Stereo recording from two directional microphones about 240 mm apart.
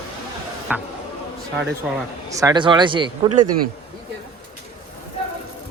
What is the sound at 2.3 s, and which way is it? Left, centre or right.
Speech, centre.